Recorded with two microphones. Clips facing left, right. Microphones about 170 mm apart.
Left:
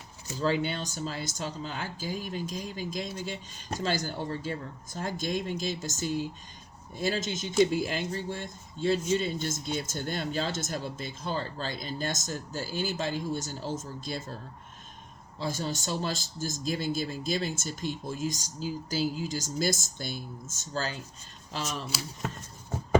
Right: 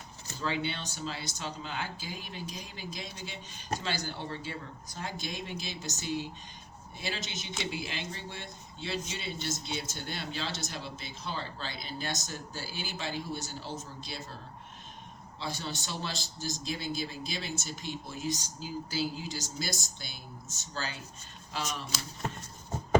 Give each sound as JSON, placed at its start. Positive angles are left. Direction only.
{"t": 0.3, "sound": "speech", "side_deg": 45}
{"t": 15.4, "sound": "speech", "side_deg": 45}